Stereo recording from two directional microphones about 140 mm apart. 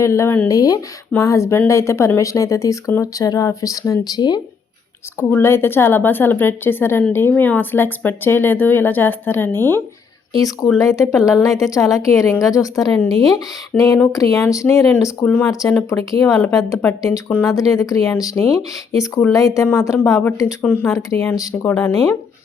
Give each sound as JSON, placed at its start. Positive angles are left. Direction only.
{"t": 0.0, "sound": "speech", "side_deg": 20}
{"t": 5.3, "sound": "speech", "side_deg": 15}
{"t": 11.4, "sound": "speech", "side_deg": 20}